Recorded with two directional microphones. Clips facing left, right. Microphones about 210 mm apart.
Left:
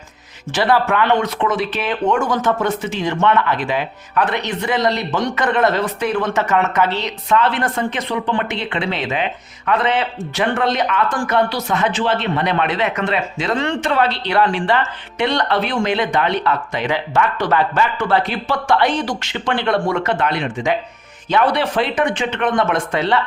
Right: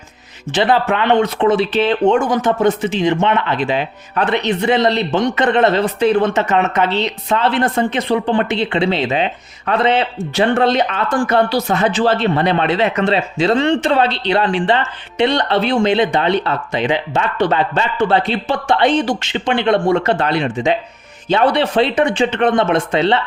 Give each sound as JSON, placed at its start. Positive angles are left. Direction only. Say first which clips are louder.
{"t": 0.5, "sound": "speech", "louder": "right 1 dB", "side_deg": -20}